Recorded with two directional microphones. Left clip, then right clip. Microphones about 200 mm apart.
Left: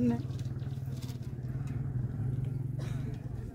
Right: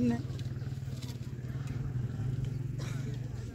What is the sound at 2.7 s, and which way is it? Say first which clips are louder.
Vehicle: even; 40° left (ahead or behind).